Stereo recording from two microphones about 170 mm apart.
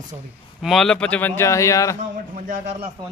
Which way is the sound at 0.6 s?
Centre (ahead or behind).